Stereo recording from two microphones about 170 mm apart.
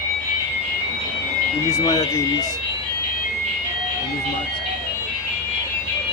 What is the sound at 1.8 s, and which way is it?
Speech, 20° left (ahead or behind).